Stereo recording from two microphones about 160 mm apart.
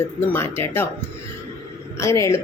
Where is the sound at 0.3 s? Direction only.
15° left (ahead or behind).